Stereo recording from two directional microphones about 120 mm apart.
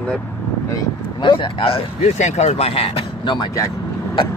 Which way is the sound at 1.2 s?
45° left (ahead or behind).